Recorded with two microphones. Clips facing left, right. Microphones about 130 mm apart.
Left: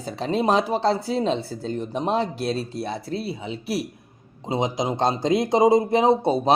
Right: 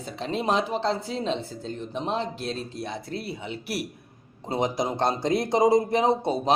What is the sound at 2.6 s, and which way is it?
Speech, 35° left (ahead or behind).